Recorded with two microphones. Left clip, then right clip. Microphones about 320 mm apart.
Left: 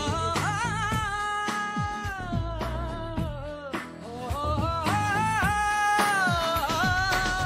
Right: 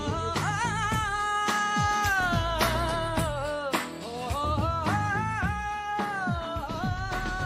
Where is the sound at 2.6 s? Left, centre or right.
Right.